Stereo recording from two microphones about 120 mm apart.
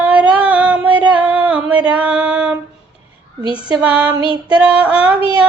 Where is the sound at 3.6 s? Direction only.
10° right (ahead or behind).